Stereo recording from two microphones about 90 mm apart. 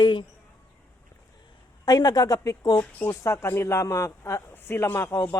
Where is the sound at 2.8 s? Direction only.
30° left (ahead or behind).